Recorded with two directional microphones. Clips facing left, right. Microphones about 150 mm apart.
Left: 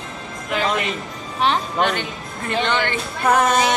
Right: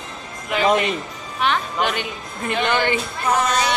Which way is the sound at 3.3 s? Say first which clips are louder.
Left 3 dB; 55° left (ahead or behind).